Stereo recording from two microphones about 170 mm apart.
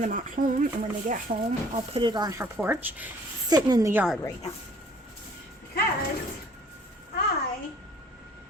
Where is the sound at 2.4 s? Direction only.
10° right (ahead or behind).